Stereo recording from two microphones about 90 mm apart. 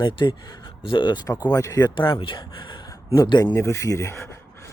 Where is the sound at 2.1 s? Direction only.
70° left (ahead or behind).